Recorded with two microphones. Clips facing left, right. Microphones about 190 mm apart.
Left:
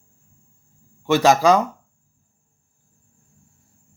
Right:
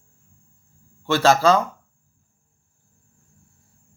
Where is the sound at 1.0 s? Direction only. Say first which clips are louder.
Left 2 dB; 15° left (ahead or behind).